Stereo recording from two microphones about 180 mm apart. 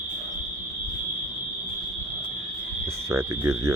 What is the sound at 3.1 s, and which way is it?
Speech, 15° right (ahead or behind).